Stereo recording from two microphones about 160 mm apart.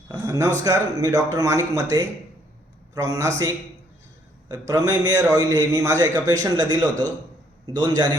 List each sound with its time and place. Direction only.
0.1 s a man's voice: 20° right (ahead or behind)